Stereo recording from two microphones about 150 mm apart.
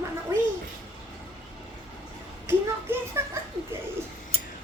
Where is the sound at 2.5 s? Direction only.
15° right (ahead or behind).